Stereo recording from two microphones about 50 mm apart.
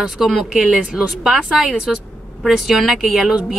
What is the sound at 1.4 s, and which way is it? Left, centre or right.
Speech, centre.